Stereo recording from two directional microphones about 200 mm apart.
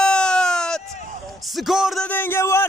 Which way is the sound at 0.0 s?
5° left (ahead or behind).